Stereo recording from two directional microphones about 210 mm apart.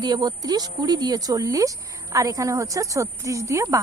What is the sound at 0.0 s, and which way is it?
A woman's voice, 20° right (ahead or behind).